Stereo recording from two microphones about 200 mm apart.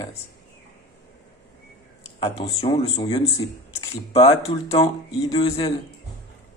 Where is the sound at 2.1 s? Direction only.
30° left (ahead or behind).